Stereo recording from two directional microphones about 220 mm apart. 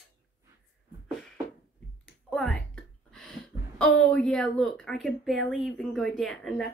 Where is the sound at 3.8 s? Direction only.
5° left (ahead or behind).